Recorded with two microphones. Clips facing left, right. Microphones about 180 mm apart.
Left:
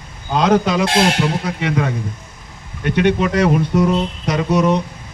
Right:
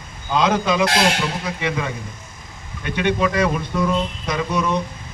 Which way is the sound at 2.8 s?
65° left (ahead or behind).